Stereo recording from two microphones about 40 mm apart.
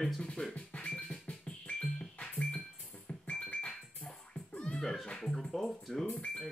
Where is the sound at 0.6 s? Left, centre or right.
Left.